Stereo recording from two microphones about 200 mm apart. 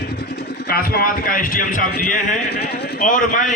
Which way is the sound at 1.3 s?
45° left (ahead or behind).